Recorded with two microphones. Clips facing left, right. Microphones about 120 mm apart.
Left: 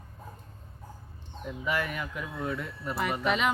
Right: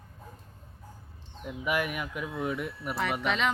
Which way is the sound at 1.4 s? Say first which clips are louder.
Right 1 dB; 15° right (ahead or behind).